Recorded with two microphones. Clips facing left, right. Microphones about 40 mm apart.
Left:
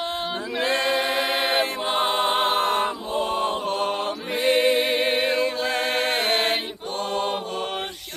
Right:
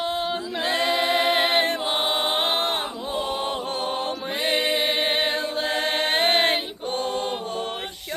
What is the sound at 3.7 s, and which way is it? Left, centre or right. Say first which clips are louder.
Music: left 2 dB; left.